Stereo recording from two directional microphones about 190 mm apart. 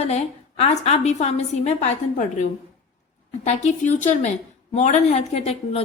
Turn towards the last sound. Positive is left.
turn(degrees=30)  # may be behind; listen again after turning